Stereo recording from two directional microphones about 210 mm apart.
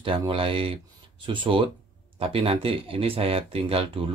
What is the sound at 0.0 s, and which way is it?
Speech, 25° right (ahead or behind).